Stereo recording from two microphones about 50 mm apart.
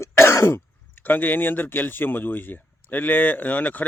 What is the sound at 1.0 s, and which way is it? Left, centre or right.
Speech, left.